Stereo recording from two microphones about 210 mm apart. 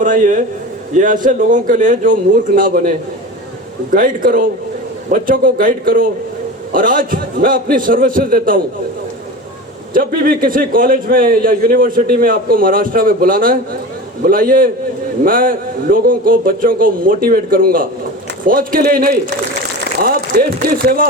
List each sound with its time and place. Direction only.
0.0 s a man's voice: 40° right (ahead or behind)
3.9 s a man's voice: 40° right (ahead or behind)
9.9 s a man's voice: 45° right (ahead or behind)